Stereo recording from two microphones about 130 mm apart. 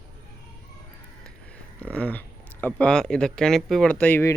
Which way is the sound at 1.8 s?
10° left (ahead or behind).